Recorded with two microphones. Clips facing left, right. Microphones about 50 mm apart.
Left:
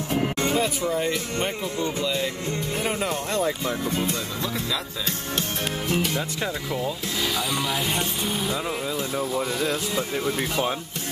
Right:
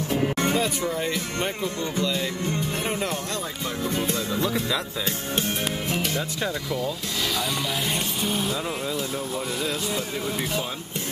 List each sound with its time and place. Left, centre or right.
0.5 s speech: centre
4.1 s speech: centre
5.9 s speech: centre
6.4 s speech: centre
7.2 s speech: centre